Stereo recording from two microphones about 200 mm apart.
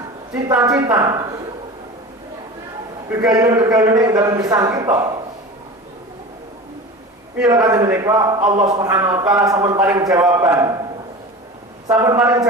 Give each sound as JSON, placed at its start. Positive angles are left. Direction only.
{"t": 0.4, "sound": "speech", "side_deg": -15}
{"t": 3.1, "sound": "a man's voice", "side_deg": -20}
{"t": 7.7, "sound": "speech", "side_deg": -15}
{"t": 11.9, "sound": "speech", "side_deg": -15}